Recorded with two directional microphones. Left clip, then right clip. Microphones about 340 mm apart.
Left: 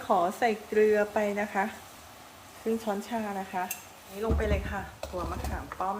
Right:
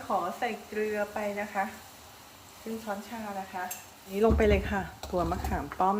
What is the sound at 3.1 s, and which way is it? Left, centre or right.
Speech, left.